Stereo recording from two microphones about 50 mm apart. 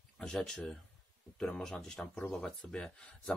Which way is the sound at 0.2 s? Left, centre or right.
Centre.